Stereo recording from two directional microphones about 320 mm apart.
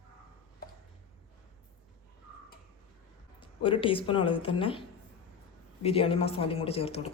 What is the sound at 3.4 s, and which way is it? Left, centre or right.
Speech, centre.